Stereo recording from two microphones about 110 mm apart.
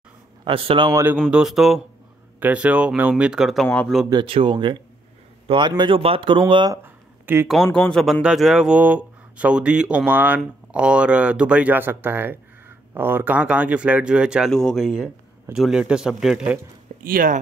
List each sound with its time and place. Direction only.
0.5 s a man's voice: 55° right (ahead or behind)
1.3 s speech: 5° right (ahead or behind)
2.4 s speech: 15° right (ahead or behind)
3.6 s speech: 10° left (ahead or behind)
4.1 s speech: 50° right (ahead or behind)
6.7 s a sound: 20° right (ahead or behind)
7.4 s speech: 5° left (ahead or behind)
14.5 s speech: 5° left (ahead or behind)
16.9 s a sound: 90° right